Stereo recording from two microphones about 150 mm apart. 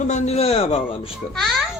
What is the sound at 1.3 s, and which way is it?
Babbling, centre (ahead or behind).